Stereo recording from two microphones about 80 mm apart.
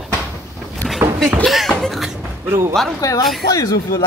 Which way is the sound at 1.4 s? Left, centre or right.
Centre.